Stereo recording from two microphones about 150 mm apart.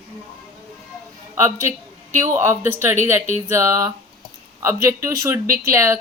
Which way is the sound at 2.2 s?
15° right (ahead or behind).